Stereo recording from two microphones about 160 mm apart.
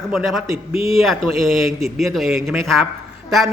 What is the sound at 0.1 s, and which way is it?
A man's voice, centre (ahead or behind).